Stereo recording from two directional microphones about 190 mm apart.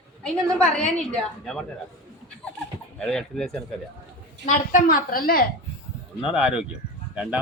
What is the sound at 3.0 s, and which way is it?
Speech, 5° left (ahead or behind).